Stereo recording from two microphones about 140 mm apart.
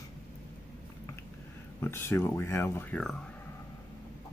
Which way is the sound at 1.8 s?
20° left (ahead or behind).